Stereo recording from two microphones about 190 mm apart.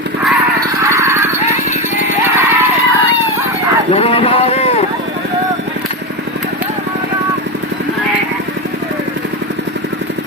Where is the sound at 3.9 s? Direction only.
30° left (ahead or behind).